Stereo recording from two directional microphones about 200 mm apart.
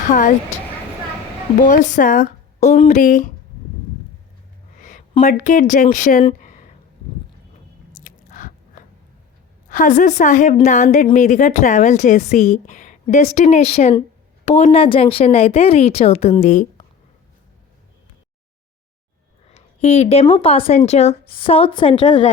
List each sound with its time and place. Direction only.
0.1 s a woman's voice: 40° left (ahead or behind)
1.6 s a woman's voice: 40° left (ahead or behind)
4.8 s a sound: 40° left (ahead or behind)
5.2 s a woman's voice: 40° left (ahead or behind)
6.4 s a sound: 40° left (ahead or behind)
8.0 s biting: 40° left (ahead or behind)
9.6 s a woman's voice: 40° left (ahead or behind)
19.5 s speech: 30° left (ahead or behind)